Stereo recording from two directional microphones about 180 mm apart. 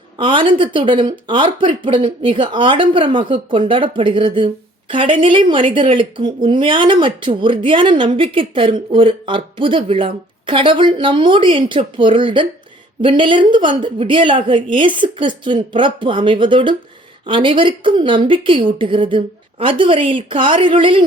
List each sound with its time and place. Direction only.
0.2 s speech: 30° right (ahead or behind)